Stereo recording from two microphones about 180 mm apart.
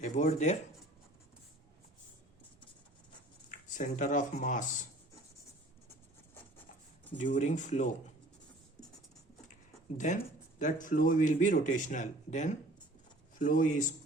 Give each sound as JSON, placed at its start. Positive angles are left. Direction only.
{"t": 0.0, "sound": "speech", "side_deg": 40}
{"t": 3.5, "sound": "speech", "side_deg": 45}
{"t": 7.2, "sound": "speech", "side_deg": 40}
{"t": 10.6, "sound": "speech", "side_deg": 45}